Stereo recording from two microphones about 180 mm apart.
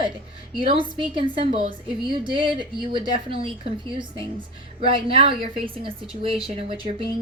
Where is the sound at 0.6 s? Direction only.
30° right (ahead or behind).